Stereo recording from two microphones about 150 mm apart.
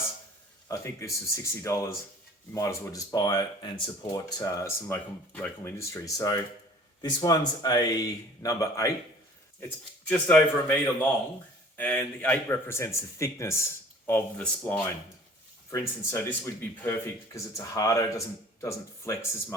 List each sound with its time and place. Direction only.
0.7 s speech: 20° left (ahead or behind)
10.1 s speech: 10° left (ahead or behind)
11.8 s speech: 10° left (ahead or behind)